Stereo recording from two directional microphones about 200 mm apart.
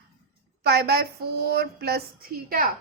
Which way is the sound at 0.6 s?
55° right (ahead or behind).